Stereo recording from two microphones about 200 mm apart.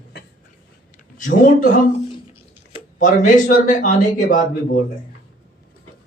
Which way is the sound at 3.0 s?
40° left (ahead or behind).